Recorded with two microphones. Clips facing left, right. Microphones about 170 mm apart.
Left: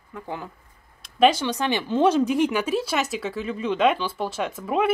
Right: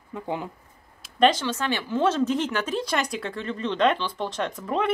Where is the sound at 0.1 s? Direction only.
20° right (ahead or behind).